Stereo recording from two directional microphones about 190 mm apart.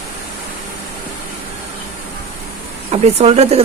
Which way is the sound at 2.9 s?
35° right (ahead or behind).